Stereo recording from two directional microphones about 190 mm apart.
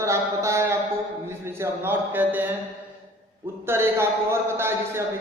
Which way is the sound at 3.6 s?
15° right (ahead or behind).